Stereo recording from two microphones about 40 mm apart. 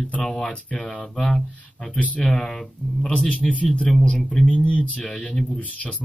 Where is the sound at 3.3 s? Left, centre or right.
Left.